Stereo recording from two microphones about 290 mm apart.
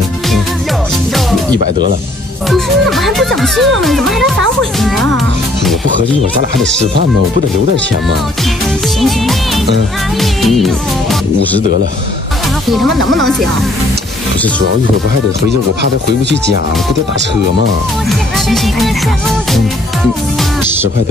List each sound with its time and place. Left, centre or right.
2.5 s speech: centre
10.2 s speech: centre
15.8 s speech: right
18.5 s speech: centre